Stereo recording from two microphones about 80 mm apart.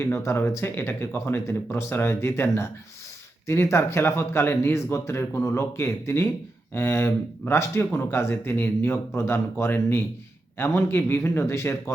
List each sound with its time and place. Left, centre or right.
0.0 s speech: left